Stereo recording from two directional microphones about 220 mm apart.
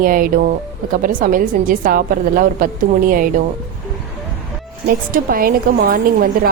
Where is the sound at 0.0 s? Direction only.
40° right (ahead or behind).